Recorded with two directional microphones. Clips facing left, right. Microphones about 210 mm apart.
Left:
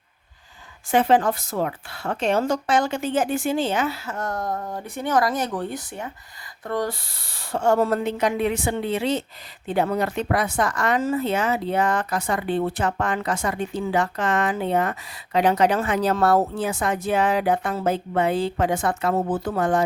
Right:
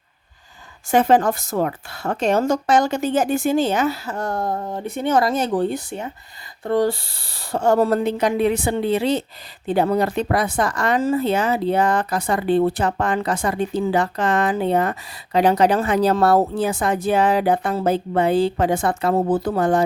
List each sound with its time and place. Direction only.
0.9 s speech: 45° right (ahead or behind)